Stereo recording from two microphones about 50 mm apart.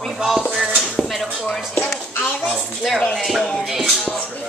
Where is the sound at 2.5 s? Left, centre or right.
Centre.